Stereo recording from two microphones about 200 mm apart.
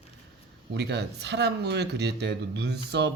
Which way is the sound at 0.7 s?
60° right (ahead or behind).